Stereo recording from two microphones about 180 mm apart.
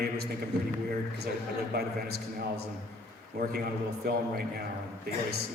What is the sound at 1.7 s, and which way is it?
Speech, 60° right (ahead or behind).